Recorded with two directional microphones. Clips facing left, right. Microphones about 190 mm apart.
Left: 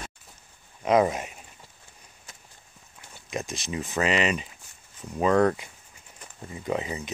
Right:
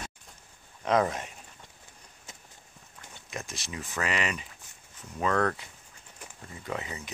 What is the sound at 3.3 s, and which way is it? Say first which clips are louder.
Speech: left 7 dB; 20° left (ahead or behind).